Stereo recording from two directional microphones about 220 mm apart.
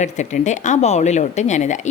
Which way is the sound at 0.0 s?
35° left (ahead or behind).